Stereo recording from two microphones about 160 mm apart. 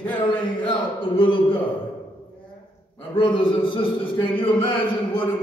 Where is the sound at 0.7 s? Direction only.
35° left (ahead or behind).